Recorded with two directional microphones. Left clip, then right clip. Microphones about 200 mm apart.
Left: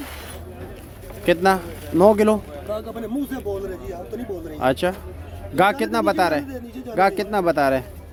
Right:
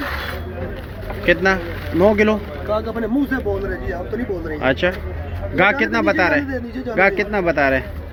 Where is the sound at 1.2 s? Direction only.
25° left (ahead or behind).